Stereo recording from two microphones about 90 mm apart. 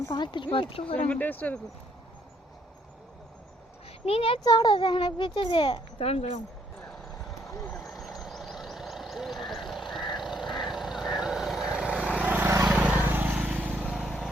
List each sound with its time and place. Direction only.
0.2 s a child's voice: 60° left (ahead or behind); by 1.0 s 90° left
1.0 s speech: 20° left (ahead or behind)
4.0 s a child's voice: 90° left
4.4 s a child's voice: 45° left (ahead or behind)
4.7 s a child's voice: 70° left (ahead or behind)
6.8 s basketball bounce: centre (ahead or behind)
7.7 s vehicle: centre (ahead or behind); by 13.9 s 15° right (ahead or behind)
13.9 s vehicle: centre (ahead or behind)